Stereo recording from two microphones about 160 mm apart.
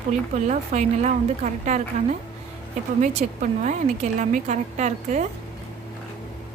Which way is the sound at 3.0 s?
50° right (ahead or behind).